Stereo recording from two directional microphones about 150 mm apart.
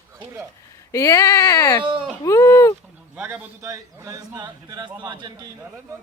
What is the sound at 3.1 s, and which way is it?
A man's voice, 15° right (ahead or behind).